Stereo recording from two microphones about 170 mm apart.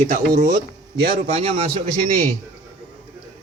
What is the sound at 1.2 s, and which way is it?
Speech, 35° right (ahead or behind).